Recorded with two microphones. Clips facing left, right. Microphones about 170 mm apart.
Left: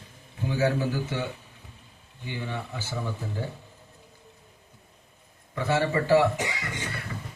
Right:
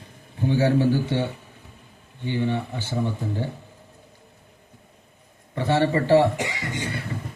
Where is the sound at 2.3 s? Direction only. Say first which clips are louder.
Right 9 dB; 30° right (ahead or behind).